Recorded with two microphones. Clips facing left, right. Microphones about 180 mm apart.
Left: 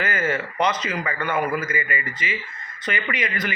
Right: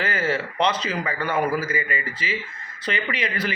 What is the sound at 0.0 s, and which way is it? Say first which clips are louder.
A man's voice: even; 30° right (ahead or behind).